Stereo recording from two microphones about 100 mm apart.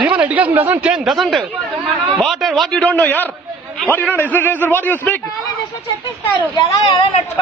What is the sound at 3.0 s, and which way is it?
A man's voice, 15° left (ahead or behind).